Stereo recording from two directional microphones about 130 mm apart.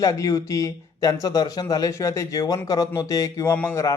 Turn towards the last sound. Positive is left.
turn(degrees=20)  # may be behind; listen again after turning